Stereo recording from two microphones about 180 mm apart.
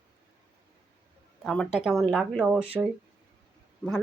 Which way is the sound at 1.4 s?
5° left (ahead or behind).